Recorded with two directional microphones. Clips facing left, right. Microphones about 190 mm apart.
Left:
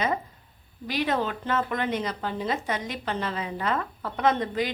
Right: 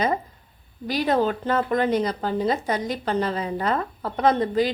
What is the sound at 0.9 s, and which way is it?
Speech, 35° right (ahead or behind).